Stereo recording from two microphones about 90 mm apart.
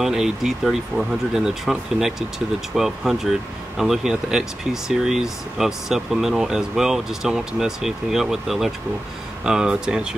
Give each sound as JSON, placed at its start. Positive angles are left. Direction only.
{"t": 0.0, "sound": "speech", "side_deg": -5}